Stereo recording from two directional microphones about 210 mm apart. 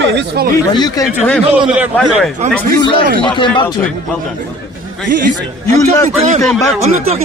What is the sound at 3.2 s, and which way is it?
Speech, 20° left (ahead or behind).